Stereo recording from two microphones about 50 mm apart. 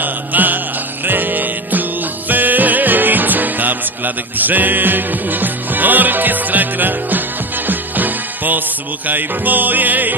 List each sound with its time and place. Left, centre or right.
0.0 s music: right